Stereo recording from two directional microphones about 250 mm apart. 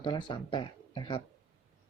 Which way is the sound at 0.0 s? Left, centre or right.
Centre.